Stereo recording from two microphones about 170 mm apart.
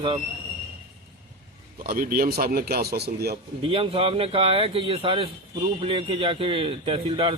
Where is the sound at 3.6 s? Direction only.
35° right (ahead or behind).